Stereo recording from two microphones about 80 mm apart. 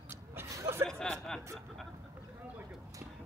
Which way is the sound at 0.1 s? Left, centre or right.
Right.